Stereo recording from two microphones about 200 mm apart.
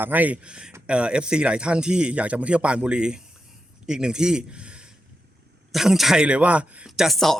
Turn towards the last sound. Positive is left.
turn(degrees=0)  # may be behind; listen again after turning